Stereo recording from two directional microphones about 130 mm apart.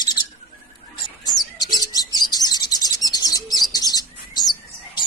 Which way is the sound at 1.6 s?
30° left (ahead or behind).